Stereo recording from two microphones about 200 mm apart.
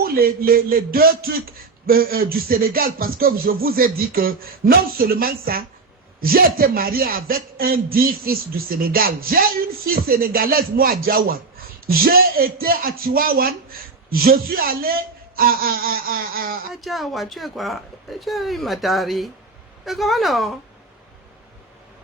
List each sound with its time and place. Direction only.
0.0 s a man's voice: 45° right (ahead or behind)
16.8 s speech: centre (ahead or behind)